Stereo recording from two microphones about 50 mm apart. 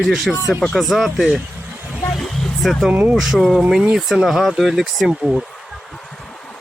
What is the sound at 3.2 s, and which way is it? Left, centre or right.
Speech, centre.